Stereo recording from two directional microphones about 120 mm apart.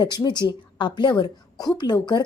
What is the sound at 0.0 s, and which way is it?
A woman's voice, 35° left (ahead or behind).